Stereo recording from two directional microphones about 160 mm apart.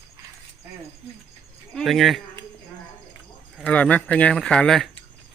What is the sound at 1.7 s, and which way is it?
Speech, centre (ahead or behind).